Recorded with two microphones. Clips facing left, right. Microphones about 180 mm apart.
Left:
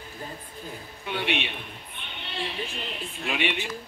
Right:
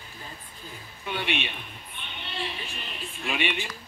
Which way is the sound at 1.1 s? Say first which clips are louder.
Left 2 dB; 15° left (ahead or behind).